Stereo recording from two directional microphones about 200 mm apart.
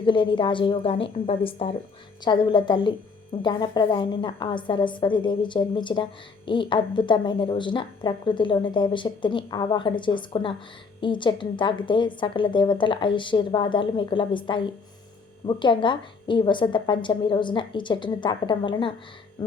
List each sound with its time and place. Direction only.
0.0 s a woman's voice: 25° left (ahead or behind)